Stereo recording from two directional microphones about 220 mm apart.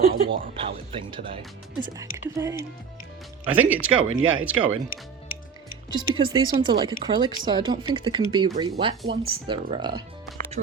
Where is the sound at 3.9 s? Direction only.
65° right (ahead or behind).